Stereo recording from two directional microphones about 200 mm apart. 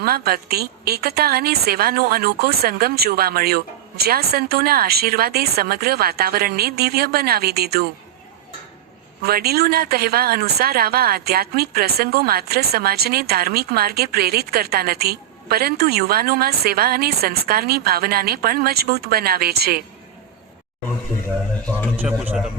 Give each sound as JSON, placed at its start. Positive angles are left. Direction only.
{"t": 0.0, "sound": "speech", "side_deg": -50}
{"t": 9.2, "sound": "speech", "side_deg": -50}
{"t": 21.9, "sound": "a man's voice", "side_deg": -10}